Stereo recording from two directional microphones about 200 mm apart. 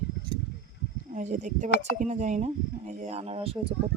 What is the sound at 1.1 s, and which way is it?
Speech, 40° right (ahead or behind).